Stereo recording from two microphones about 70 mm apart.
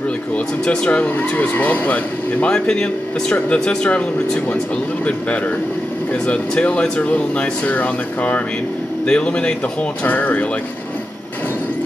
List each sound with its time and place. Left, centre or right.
0.7 s speech: centre
2.4 s speech: centre
6.1 s speech: centre